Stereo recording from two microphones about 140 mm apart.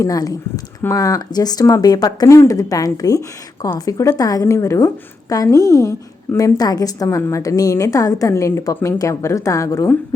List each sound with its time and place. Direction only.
0.0 s a woman's voice: 25° left (ahead or behind)